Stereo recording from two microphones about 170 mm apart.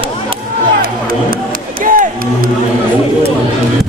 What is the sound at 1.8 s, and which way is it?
Music, 55° right (ahead or behind).